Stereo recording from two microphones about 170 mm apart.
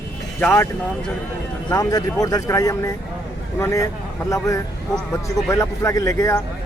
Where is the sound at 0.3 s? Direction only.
15° left (ahead or behind).